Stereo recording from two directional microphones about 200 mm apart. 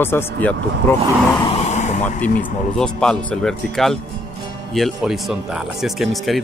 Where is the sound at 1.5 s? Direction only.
35° left (ahead or behind).